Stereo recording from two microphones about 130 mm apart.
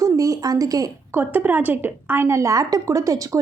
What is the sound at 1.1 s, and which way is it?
Speech, 15° right (ahead or behind).